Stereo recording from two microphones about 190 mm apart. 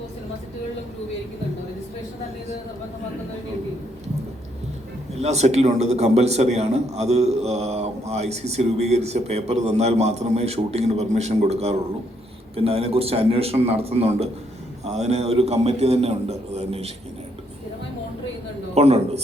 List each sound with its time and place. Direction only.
5.2 s a man's voice: 35° right (ahead or behind)
18.7 s a man's voice: 35° right (ahead or behind)